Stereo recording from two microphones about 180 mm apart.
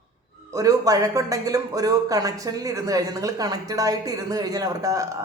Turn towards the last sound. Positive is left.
turn(degrees=-20)  # may be behind; listen again after turning